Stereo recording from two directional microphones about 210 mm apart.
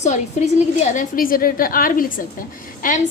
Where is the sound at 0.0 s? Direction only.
35° left (ahead or behind).